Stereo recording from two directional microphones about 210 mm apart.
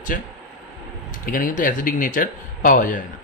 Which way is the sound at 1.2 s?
40° left (ahead or behind).